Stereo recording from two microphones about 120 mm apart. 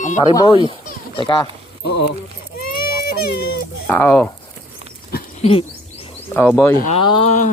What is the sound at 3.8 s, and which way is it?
Speech, 15° left (ahead or behind).